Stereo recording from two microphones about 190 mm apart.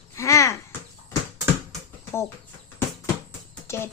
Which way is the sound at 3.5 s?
10° left (ahead or behind).